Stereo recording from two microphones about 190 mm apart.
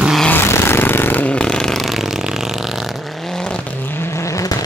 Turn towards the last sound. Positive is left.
turn(degrees=15)  # may be behind; listen again after turning